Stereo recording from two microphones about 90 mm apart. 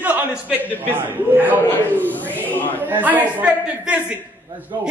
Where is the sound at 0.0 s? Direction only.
20° right (ahead or behind).